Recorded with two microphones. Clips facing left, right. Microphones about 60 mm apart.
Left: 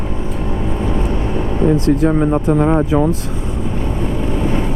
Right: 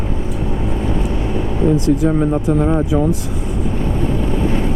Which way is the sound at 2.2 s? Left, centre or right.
Left.